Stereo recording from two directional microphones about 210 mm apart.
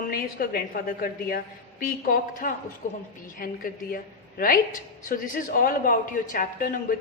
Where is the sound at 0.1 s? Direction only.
45° left (ahead or behind).